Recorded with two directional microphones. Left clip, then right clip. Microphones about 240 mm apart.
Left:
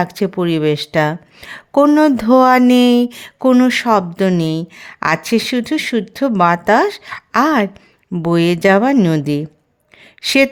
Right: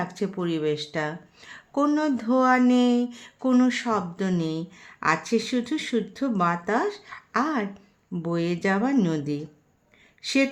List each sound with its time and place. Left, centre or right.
0.0 s speech: left